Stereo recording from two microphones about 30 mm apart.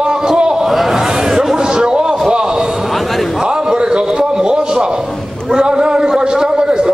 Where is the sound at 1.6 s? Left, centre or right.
Right.